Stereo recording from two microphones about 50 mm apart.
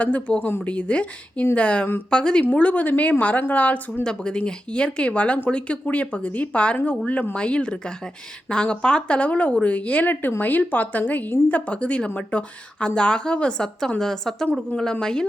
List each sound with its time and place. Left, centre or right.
0.0 s a woman's voice: left
2.4 s a woman's voice: left
4.0 s speech: centre
14.0 s a woman's voice: centre